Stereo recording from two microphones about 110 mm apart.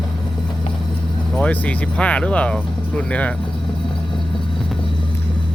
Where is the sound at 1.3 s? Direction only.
10° left (ahead or behind).